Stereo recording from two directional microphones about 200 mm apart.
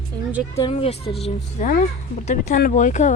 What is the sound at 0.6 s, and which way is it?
A woman's voice, 30° left (ahead or behind).